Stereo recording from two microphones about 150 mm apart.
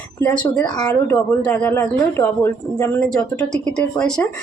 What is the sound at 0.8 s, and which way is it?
A woman's voice, 10° left (ahead or behind).